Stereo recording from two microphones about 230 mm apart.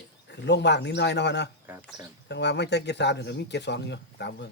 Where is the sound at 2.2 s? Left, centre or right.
Left.